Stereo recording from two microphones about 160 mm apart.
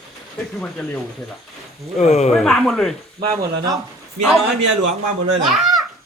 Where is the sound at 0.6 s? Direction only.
10° left (ahead or behind).